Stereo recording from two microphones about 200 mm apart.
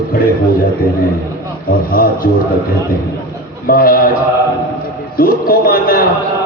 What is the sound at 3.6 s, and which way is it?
Speech, 45° left (ahead or behind).